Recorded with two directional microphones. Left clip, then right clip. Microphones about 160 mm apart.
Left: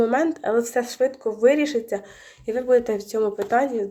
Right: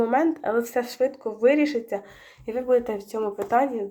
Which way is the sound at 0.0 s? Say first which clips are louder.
Left 1 dB; 15° left (ahead or behind).